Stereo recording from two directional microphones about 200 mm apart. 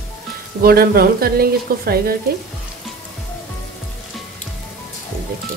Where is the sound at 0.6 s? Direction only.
50° right (ahead or behind).